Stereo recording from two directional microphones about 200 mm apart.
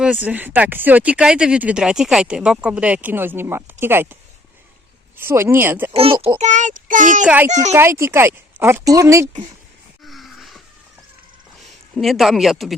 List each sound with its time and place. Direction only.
0.0 s speech: 5° right (ahead or behind)
5.9 s a child's voice: 25° right (ahead or behind)
6.4 s a child's voice: 35° right (ahead or behind)
7.7 s speech: 15° right (ahead or behind)
10.0 s wheeze: centre (ahead or behind)
11.9 s speech: centre (ahead or behind)